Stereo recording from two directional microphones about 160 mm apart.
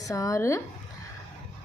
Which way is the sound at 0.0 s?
20° left (ahead or behind).